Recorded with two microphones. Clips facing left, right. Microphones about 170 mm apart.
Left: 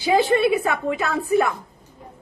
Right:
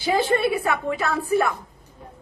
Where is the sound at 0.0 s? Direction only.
20° left (ahead or behind).